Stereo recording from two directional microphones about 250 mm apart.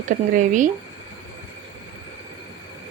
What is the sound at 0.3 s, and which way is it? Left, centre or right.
Speech, right.